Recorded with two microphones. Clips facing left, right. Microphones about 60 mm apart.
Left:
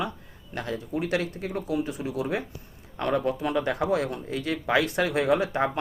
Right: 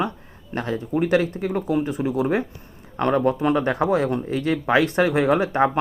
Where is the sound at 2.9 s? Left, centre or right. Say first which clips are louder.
Right 6 dB; right.